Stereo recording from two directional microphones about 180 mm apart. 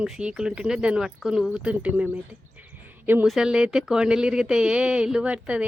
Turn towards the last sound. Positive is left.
turn(degrees=-5)  # may be behind; listen again after turning